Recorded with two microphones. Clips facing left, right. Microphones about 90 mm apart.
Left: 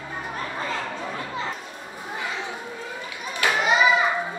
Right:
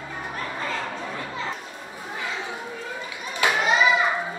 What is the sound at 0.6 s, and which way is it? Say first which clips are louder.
Chatter: even; 15° left (ahead or behind).